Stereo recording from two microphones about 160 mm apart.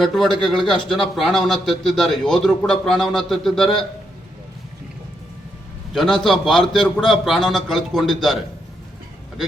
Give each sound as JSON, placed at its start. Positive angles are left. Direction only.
{"t": 0.0, "sound": "speech", "side_deg": 0}
{"t": 5.9, "sound": "speech", "side_deg": 0}